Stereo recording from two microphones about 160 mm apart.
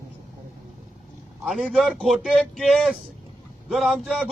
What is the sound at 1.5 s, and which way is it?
A man's voice, centre (ahead or behind).